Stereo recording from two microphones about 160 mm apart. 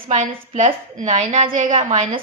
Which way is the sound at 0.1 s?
50° right (ahead or behind).